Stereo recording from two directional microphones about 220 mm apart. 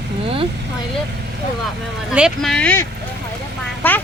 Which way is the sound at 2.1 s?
5° right (ahead or behind).